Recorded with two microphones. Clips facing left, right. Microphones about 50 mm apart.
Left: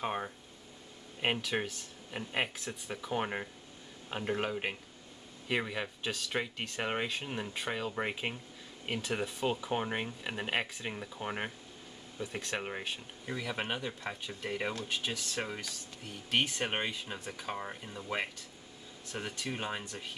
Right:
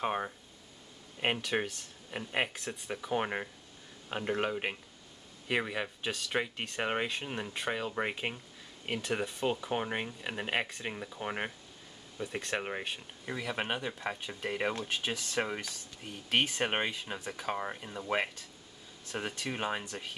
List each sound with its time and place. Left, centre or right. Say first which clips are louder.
0.0 s speech: right 2 dB; centre